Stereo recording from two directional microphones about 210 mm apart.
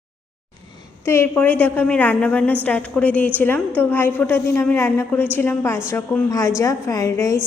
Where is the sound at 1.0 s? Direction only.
10° left (ahead or behind).